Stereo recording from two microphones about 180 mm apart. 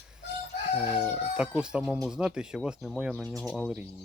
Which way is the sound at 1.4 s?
5° right (ahead or behind).